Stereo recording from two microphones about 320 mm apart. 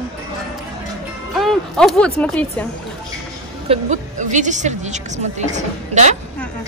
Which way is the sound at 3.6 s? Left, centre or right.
Right.